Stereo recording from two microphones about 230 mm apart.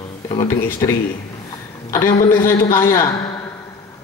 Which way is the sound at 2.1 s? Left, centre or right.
Left.